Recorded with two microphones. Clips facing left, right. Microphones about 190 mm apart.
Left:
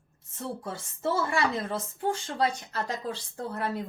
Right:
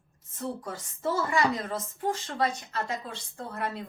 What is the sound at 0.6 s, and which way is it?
A woman's voice, 30° left (ahead or behind).